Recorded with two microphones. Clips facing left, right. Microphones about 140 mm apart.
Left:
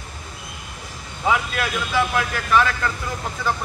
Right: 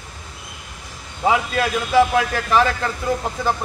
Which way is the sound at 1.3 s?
30° right (ahead or behind).